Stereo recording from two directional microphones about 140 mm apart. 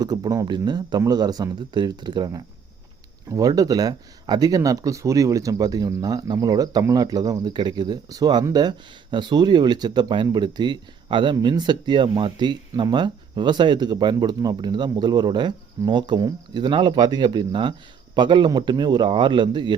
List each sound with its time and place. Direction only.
0.0 s speech: 25° right (ahead or behind)